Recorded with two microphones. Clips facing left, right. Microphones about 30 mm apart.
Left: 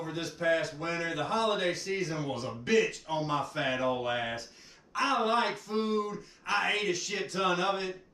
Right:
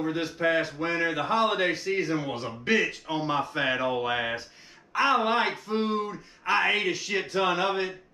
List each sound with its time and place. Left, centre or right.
0.0 s a man's voice: right